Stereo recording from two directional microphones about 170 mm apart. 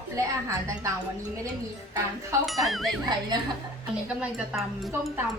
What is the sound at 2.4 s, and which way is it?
Speech, centre (ahead or behind).